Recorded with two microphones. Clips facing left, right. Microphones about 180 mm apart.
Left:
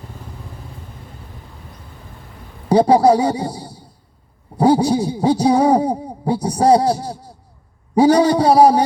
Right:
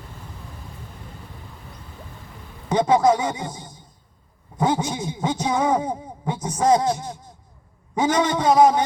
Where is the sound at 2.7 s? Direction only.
35° left (ahead or behind).